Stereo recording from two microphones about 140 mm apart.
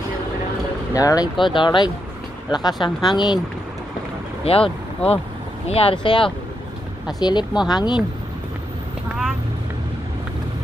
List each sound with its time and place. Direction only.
0.9 s speech: 25° left (ahead or behind)
4.5 s speech: 45° left (ahead or behind)